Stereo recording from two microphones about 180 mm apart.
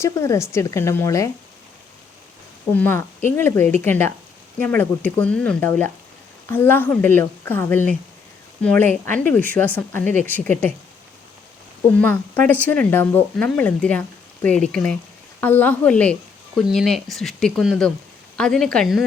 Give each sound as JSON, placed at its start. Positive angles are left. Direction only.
{"t": 0.0, "sound": "a woman's voice", "side_deg": 15}
{"t": 2.7, "sound": "a woman's voice", "side_deg": 10}
{"t": 11.9, "sound": "a woman's voice", "side_deg": 10}